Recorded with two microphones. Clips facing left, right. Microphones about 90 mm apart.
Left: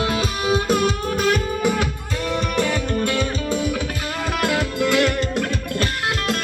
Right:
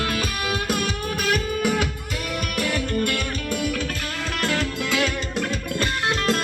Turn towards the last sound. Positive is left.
turn(degrees=0)  # may be behind; listen again after turning